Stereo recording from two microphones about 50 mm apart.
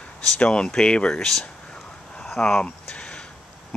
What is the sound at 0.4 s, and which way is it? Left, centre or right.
Speech, centre.